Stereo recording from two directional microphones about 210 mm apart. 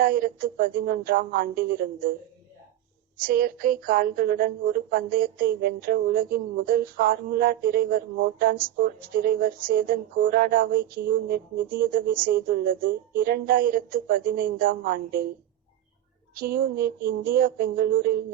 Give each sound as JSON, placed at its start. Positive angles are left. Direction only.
{"t": 0.0, "sound": "a woman's voice", "side_deg": -40}
{"t": 3.2, "sound": "a woman's voice", "side_deg": -45}
{"t": 16.4, "sound": "a woman's voice", "side_deg": -40}